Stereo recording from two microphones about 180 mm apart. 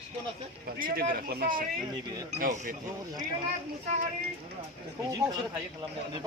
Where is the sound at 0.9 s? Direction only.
55° right (ahead or behind).